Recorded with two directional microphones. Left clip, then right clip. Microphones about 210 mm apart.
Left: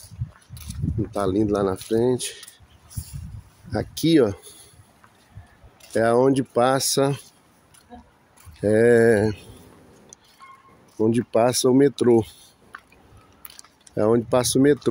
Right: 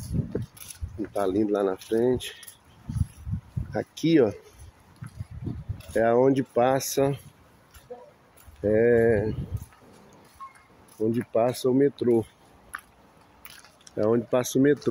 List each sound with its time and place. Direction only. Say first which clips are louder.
1.1 s speech: left 2 dB; 30° left (ahead or behind)
3.7 s speech: left 3 dB; 30° left (ahead or behind)
5.9 s speech: left 2 dB; 35° left (ahead or behind)
8.5 s speech: left 4 dB; 40° left (ahead or behind)
11.0 s speech: left 5 dB; 50° left (ahead or behind)
13.8 s speech: left 4 dB; 35° left (ahead or behind)